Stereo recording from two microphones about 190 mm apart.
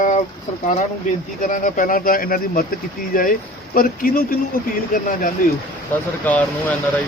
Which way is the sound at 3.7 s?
50° left (ahead or behind).